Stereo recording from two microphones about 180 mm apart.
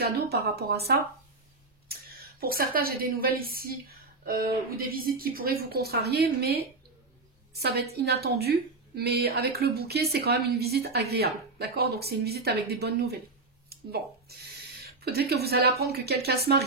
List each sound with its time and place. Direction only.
0.3 s a woman's voice: 60° right (ahead or behind)
14.8 s a woman's voice: 60° right (ahead or behind)